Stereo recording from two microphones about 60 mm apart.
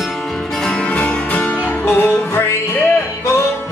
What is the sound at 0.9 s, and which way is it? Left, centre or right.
Music, left.